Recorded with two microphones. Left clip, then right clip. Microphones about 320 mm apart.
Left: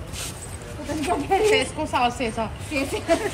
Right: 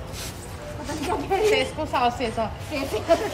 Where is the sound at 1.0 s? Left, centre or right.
Centre.